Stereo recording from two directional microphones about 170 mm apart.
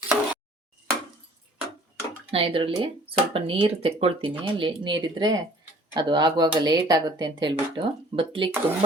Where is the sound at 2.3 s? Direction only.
35° right (ahead or behind).